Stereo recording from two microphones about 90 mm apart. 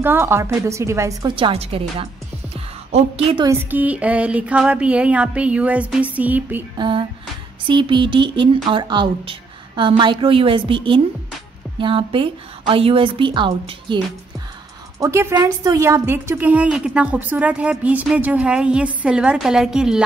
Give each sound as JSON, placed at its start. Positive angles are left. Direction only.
{"t": 0.0, "sound": "a woman's voice", "side_deg": -25}
{"t": 1.3, "sound": "a woman's voice", "side_deg": -80}
{"t": 3.2, "sound": "a woman's voice", "side_deg": -90}
{"t": 3.7, "sound": "a sound", "side_deg": -15}
{"t": 6.8, "sound": "a woman's voice", "side_deg": -65}
{"t": 7.6, "sound": "a sound", "side_deg": -65}
{"t": 8.6, "sound": "a woman's voice", "side_deg": -60}
{"t": 15.0, "sound": "a woman's voice", "side_deg": -30}
{"t": 16.4, "sound": "a sound", "side_deg": -15}